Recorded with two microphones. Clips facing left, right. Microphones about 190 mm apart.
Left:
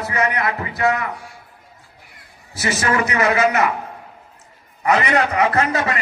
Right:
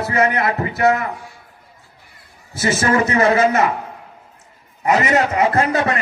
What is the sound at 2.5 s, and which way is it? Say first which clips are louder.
A man's voice: right 3 dB; 25° right (ahead or behind).